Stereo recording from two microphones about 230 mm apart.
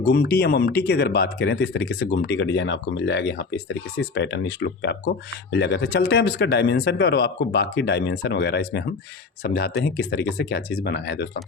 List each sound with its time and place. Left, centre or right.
0.0 s speech: left